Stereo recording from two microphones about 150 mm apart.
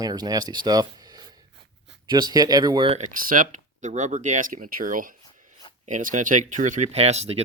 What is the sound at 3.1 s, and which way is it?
Speech, 65° right (ahead or behind).